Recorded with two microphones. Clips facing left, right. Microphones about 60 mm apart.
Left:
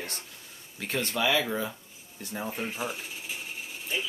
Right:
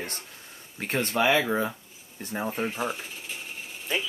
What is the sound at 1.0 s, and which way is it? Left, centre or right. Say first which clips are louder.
Speech: right 4 dB; right.